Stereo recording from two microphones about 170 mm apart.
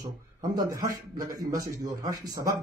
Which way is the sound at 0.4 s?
20° right (ahead or behind).